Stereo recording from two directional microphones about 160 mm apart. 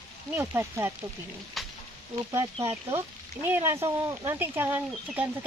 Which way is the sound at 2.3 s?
15° right (ahead or behind).